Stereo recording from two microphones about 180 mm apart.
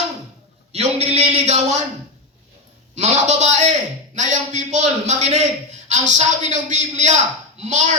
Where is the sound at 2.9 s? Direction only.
40° right (ahead or behind).